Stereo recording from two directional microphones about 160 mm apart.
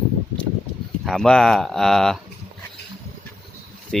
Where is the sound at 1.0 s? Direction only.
5° left (ahead or behind).